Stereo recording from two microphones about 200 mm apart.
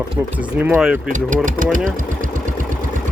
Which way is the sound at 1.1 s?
40° right (ahead or behind).